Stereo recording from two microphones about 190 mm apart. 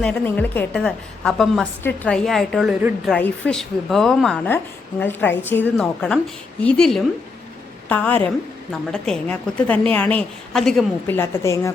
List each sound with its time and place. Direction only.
0.0 s a woman's voice: 5° left (ahead or behind)
11.2 s a woman's voice: 15° left (ahead or behind)